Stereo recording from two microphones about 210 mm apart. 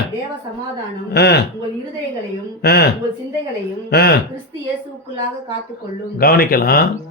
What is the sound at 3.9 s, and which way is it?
Speech, 50° left (ahead or behind).